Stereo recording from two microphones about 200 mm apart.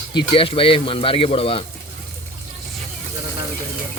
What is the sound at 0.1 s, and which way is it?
Speech, 25° left (ahead or behind).